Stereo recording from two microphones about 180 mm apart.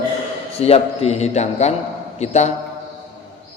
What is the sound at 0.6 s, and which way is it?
A man's voice, 35° left (ahead or behind).